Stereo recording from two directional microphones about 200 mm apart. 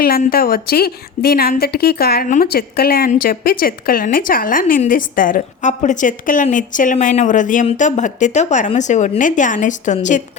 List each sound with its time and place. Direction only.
0.0 s a woman's voice: 45° left (ahead or behind)